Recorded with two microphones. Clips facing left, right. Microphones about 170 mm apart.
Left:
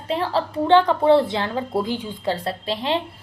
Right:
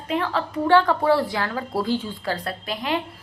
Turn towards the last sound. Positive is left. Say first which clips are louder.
# left 2 dB
turn(degrees=30)  # may be behind; listen again after turning